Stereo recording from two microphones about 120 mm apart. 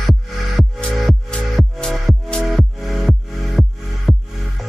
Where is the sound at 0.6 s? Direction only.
Centre (ahead or behind).